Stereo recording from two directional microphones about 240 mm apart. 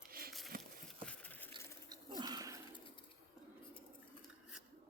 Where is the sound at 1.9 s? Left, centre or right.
Centre.